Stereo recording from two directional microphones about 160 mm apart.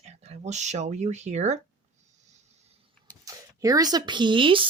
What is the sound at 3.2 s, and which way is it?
Speech, 20° right (ahead or behind).